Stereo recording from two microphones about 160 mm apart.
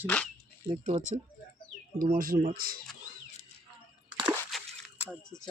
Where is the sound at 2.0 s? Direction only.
60° right (ahead or behind).